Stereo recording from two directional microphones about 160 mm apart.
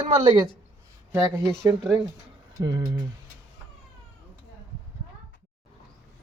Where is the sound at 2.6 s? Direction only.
25° right (ahead or behind).